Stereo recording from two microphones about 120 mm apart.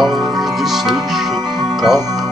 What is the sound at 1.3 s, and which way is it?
Music, 35° right (ahead or behind).